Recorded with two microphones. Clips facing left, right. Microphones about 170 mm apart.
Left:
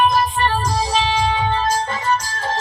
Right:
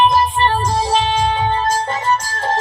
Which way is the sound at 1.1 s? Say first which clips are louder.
Right 2 dB; 50° right (ahead or behind).